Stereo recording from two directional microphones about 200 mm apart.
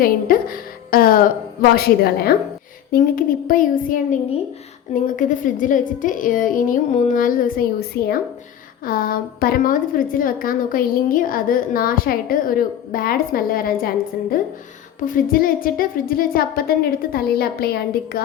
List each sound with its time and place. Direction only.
0.3 s speech: 45° left (ahead or behind)
0.9 s music: 45° left (ahead or behind)
1.7 s a woman's voice: 50° left (ahead or behind)